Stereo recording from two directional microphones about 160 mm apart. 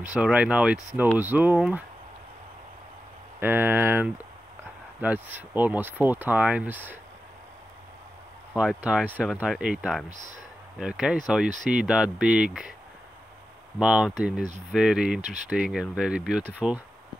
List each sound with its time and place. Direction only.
0.1 s speech: 5° right (ahead or behind)
3.3 s speech: 15° right (ahead or behind)
8.5 s speech: 5° right (ahead or behind)
10.0 s speech: 50° right (ahead or behind)
10.8 s speech: 5° right (ahead or behind)
11.4 s speech: 50° right (ahead or behind)
11.7 s speech: 5° right (ahead or behind)
13.7 s speech: 5° right (ahead or behind)
15.2 s speech: 50° right (ahead or behind)
16.0 s speech: 5° right (ahead or behind)